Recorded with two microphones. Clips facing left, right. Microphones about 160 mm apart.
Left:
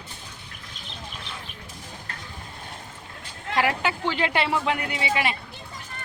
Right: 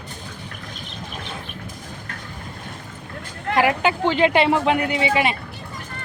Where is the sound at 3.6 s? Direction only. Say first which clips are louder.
Right 5 dB; 20° right (ahead or behind).